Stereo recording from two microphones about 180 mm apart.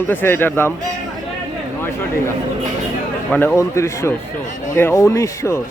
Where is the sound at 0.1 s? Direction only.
10° left (ahead or behind).